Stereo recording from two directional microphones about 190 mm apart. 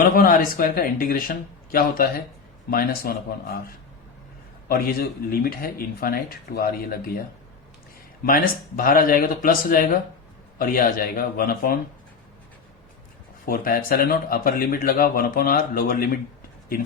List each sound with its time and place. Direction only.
0.0 s speech: 50° left (ahead or behind)
8.2 s speech: 50° left (ahead or behind)
13.4 s speech: 50° left (ahead or behind)